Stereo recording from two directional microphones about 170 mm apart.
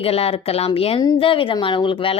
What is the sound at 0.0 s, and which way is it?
Speech, 35° left (ahead or behind).